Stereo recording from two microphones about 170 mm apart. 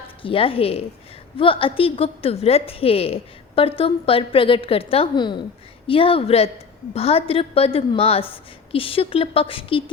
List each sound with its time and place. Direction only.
0.2 s a woman's voice: 30° left (ahead or behind)